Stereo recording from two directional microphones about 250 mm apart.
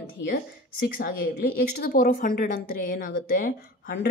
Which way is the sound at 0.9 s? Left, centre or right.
Left.